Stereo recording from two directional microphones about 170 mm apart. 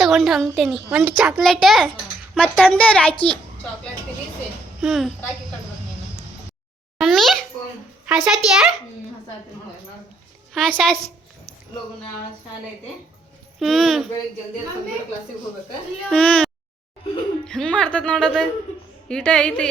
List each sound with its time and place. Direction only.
0.0 s a woman's voice: centre (ahead or behind)
4.8 s a woman's voice: centre (ahead or behind)
7.0 s a woman's voice: centre (ahead or behind)
10.5 s a woman's voice: centre (ahead or behind)
13.6 s a woman's voice: centre (ahead or behind)
16.0 s a woman's voice: 5° left (ahead or behind)